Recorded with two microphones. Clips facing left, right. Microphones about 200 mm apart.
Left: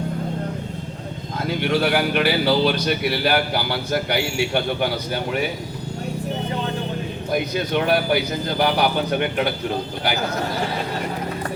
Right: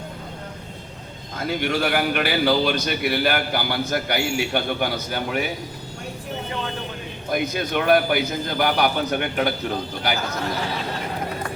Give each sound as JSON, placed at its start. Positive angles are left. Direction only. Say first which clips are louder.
{"t": 1.4, "sound": "speech", "louder": "left 2 dB", "side_deg": -45}
{"t": 7.3, "sound": "speech", "louder": "left 1 dB", "side_deg": -50}